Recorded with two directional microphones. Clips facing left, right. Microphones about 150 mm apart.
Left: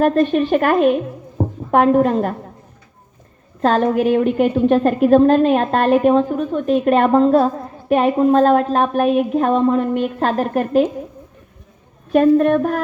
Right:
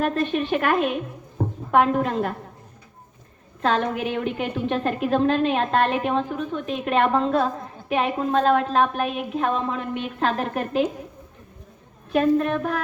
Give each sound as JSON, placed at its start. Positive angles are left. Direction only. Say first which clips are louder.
{"t": 0.0, "sound": "a woman's voice", "louder": "left 8 dB", "side_deg": 45}
{"t": 3.6, "sound": "a woman's voice", "louder": "left 7 dB", "side_deg": 45}
{"t": 12.1, "sound": "a woman's voice", "louder": "left 7 dB", "side_deg": 45}